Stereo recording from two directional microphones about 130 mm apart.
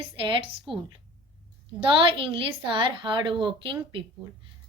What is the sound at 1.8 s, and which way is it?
A woman's voice, 40° right (ahead or behind).